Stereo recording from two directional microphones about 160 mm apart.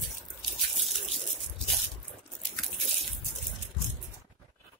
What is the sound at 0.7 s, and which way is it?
Water, centre (ahead or behind).